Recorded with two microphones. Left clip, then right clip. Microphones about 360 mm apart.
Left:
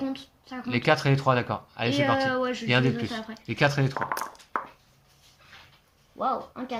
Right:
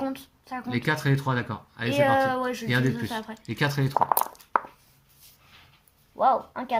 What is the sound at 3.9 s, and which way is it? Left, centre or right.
Speech, centre.